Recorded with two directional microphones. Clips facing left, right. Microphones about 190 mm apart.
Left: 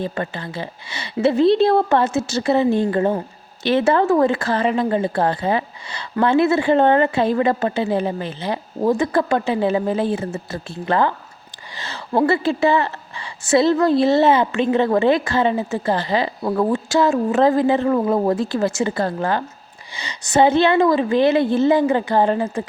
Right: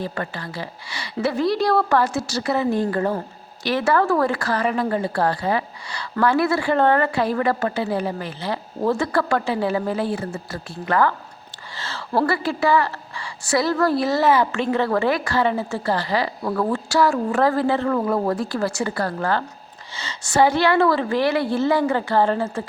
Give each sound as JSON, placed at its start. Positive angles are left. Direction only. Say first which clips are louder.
{"t": 0.0, "sound": "a woman's voice", "louder": "left 3 dB", "side_deg": 20}